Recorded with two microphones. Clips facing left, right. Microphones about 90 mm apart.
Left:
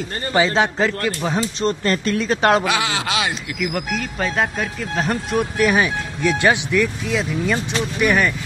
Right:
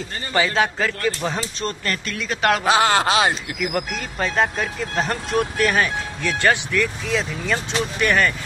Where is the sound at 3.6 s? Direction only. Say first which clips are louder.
Left 2 dB; centre (ahead or behind).